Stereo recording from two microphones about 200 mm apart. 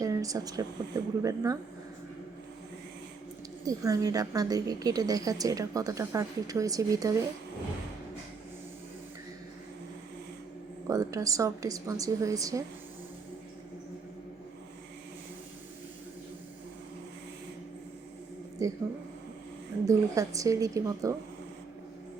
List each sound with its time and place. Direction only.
0.0 s a woman's voice: 15° right (ahead or behind)
3.7 s a woman's voice: 15° right (ahead or behind)
10.8 s a woman's voice: 15° right (ahead or behind)
18.6 s a woman's voice: 15° right (ahead or behind)
19.9 s a woman's voice: 15° right (ahead or behind)